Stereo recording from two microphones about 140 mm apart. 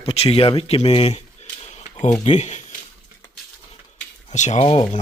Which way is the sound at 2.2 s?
55° left (ahead or behind).